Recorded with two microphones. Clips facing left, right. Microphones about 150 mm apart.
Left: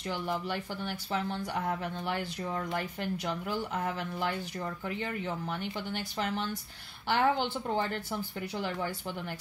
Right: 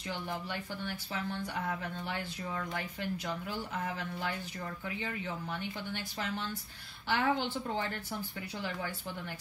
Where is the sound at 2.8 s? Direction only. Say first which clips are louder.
Left 3 dB; 65° left (ahead or behind).